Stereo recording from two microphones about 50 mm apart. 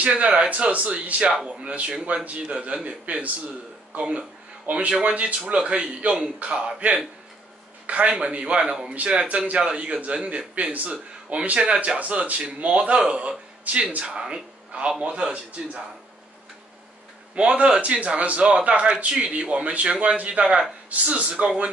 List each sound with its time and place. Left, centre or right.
0.0 s a man's voice: right
7.8 s a sound: right
8.1 s a man's voice: right
17.4 s a man's voice: right